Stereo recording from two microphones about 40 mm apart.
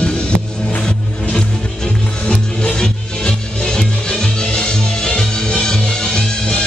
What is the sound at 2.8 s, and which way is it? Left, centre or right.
Music, centre.